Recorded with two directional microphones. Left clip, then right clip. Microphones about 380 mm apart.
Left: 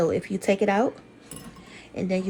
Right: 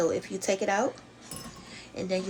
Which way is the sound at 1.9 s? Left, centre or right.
Centre.